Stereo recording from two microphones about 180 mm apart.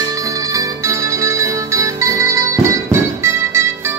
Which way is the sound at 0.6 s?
15° right (ahead or behind).